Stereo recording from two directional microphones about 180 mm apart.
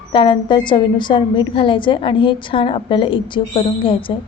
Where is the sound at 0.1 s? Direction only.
25° left (ahead or behind).